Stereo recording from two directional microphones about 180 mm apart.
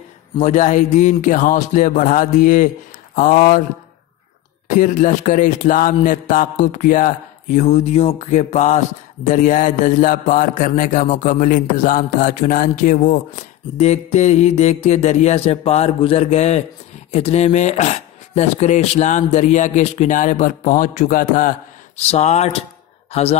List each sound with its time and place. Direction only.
0.4 s a man's voice: 45° left (ahead or behind)
4.6 s a man's voice: 45° left (ahead or behind)